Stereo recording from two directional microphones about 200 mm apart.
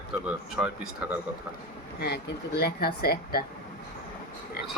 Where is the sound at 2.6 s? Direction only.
50° left (ahead or behind).